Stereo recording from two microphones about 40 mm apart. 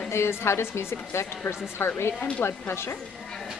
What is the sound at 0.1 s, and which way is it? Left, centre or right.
Speech, left.